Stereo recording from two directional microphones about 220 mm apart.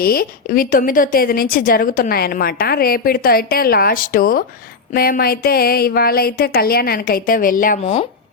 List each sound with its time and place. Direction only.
0.0 s a woman's voice: 40° left (ahead or behind)